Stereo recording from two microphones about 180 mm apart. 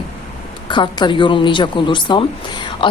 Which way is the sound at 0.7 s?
25° left (ahead or behind).